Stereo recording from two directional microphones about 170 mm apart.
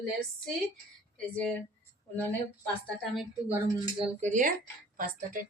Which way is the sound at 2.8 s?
Centre (ahead or behind).